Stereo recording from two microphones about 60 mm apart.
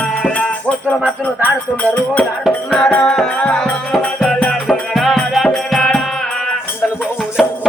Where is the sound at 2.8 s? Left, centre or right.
Centre.